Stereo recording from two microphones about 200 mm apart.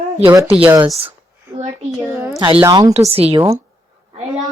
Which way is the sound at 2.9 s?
30° right (ahead or behind).